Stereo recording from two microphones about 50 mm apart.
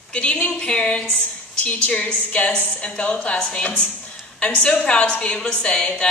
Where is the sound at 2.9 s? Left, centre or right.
Left.